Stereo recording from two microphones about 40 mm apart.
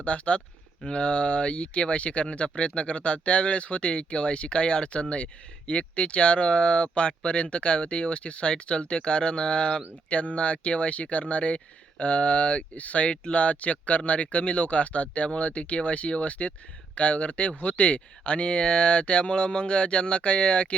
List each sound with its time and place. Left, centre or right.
0.0 s speech: left